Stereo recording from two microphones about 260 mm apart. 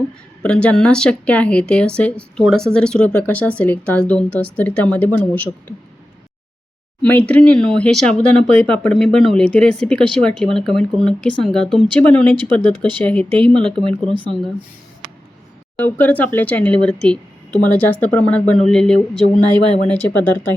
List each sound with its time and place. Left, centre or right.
0.4 s speech: centre
7.0 s speech: centre
13.8 s speech: centre
15.7 s speech: centre
19.4 s speech: centre
19.9 s speech: centre